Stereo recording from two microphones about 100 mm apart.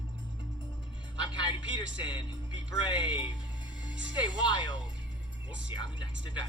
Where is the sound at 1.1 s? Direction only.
50° left (ahead or behind).